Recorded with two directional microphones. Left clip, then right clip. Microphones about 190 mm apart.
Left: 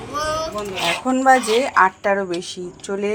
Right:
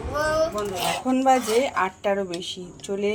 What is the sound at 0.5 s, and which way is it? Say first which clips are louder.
Speech: left 4 dB; 5° left (ahead or behind).